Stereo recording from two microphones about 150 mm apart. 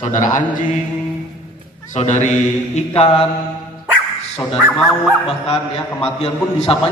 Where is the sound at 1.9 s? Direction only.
50° left (ahead or behind).